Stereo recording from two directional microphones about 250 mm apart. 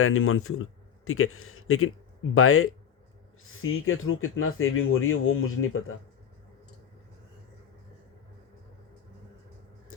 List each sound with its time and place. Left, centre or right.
0.0 s speech: left